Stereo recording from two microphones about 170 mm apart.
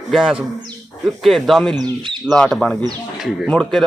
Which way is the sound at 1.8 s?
25° right (ahead or behind).